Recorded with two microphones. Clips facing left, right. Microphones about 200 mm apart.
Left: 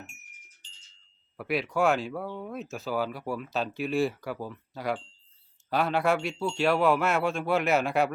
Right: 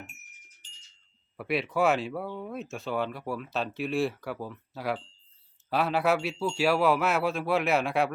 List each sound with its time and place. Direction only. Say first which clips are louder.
1.4 s speech: even; centre (ahead or behind)